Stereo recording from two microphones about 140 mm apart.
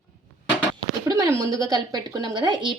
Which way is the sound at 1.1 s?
25° right (ahead or behind).